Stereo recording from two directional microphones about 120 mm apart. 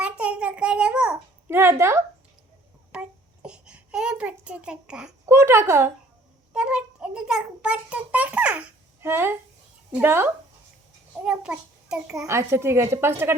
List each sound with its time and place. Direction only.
0.0 s a sound: 10° right (ahead or behind)
1.5 s a woman's voice: 20° right (ahead or behind)
2.9 s a child's voice: 10° right (ahead or behind)
5.2 s a woman's voice: 20° right (ahead or behind)
6.5 s a child's voice: 10° right (ahead or behind)
12.3 s a woman's voice: 20° right (ahead or behind)